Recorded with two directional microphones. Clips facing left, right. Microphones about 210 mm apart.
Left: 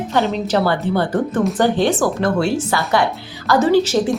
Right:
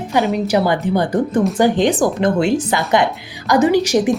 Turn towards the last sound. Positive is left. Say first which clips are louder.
# right 1 dB
turn(degrees=-15)  # may be behind; listen again after turning